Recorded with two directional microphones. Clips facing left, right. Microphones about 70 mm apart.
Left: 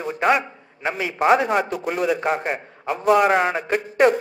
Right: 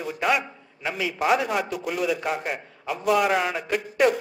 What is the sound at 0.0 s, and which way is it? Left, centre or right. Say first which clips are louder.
A man's voice: left 5 dB; left.